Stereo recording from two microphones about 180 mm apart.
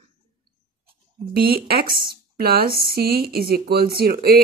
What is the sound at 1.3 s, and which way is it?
Speech, 55° right (ahead or behind).